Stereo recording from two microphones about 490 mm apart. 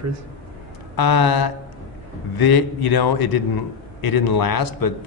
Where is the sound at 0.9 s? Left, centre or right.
Left.